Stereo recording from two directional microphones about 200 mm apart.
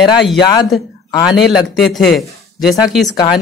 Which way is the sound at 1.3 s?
Centre (ahead or behind).